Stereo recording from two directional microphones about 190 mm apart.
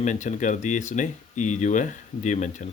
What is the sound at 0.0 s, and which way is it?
Speech, 40° left (ahead or behind).